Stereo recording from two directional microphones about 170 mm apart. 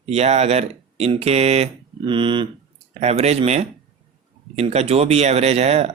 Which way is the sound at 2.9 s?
40° right (ahead or behind).